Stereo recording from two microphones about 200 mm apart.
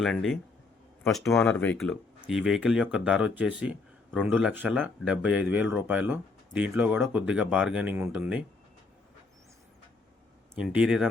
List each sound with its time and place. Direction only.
0.0 s speech: centre (ahead or behind)
10.5 s speech: 5° right (ahead or behind)